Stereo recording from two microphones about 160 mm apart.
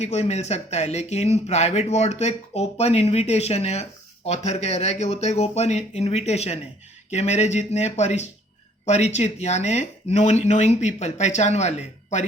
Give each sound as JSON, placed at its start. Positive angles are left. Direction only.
{"t": 0.0, "sound": "speech", "side_deg": 45}